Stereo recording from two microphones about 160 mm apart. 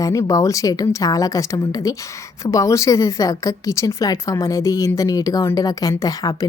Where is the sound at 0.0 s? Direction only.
20° left (ahead or behind).